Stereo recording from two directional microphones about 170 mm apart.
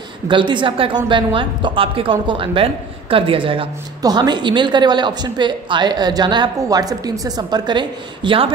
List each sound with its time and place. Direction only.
0.3 s a woman's voice: 30° right (ahead or behind)